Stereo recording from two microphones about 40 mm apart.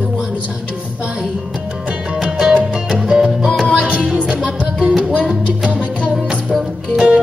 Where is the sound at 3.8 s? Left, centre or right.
Right.